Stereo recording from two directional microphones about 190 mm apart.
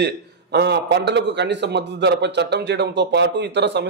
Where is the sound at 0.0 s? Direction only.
60° right (ahead or behind).